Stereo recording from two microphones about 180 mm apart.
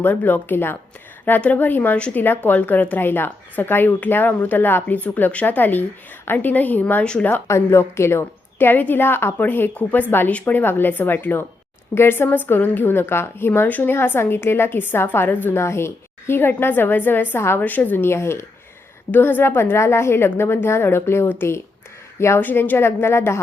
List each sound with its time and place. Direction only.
0.0 s a woman's voice: 10° left (ahead or behind)